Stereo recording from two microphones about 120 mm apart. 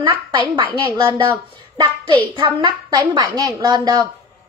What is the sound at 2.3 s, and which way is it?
A woman's voice, 45° right (ahead or behind).